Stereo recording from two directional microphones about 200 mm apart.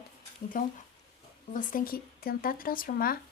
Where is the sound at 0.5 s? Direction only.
45° left (ahead or behind).